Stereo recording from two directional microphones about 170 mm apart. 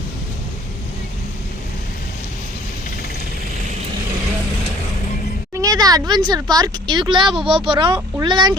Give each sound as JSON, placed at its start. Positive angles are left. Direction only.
{"t": 5.5, "sound": "speech", "side_deg": -20}